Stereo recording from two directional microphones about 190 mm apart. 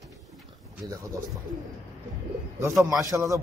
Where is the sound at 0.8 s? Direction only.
15° right (ahead or behind).